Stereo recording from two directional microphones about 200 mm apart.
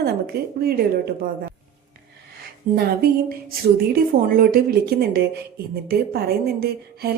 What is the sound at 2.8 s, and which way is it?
A woman's voice, 50° right (ahead or behind).